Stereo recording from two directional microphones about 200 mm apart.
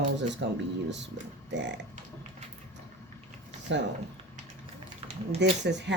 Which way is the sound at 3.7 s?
65° right (ahead or behind).